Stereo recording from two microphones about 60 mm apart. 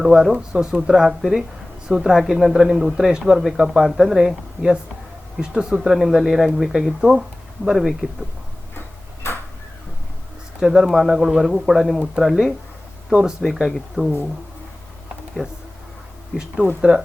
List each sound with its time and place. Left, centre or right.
0.0 s speech: centre
5.8 s speech: centre
9.2 s tick-tock: left
10.6 s speech: centre
13.9 s speech: centre
16.6 s speech: right